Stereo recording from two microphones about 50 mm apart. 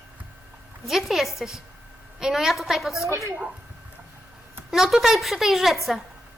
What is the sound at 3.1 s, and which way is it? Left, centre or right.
Speech, right.